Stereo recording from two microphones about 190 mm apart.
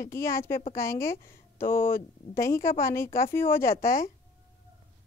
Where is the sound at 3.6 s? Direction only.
50° left (ahead or behind).